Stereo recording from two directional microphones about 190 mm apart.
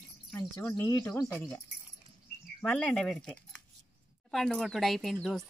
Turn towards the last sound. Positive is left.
turn(degrees=0)  # may be behind; listen again after turning